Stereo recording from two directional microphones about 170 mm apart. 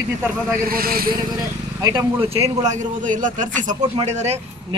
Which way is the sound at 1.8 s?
30° right (ahead or behind).